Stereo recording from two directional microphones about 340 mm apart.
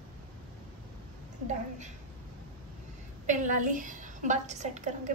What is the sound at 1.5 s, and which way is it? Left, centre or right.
Speech, right.